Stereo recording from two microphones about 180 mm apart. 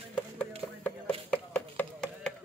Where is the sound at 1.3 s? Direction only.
10° left (ahead or behind).